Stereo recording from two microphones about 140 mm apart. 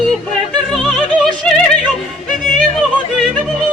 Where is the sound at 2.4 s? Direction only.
Centre (ahead or behind).